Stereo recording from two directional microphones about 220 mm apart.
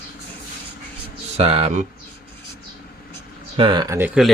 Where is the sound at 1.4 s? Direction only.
25° right (ahead or behind).